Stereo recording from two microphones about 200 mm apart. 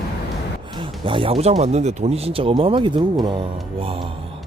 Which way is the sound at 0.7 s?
25° right (ahead or behind).